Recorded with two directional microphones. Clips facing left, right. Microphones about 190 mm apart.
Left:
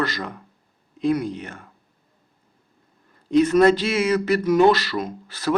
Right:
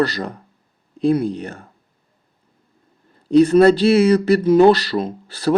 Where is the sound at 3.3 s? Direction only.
35° right (ahead or behind).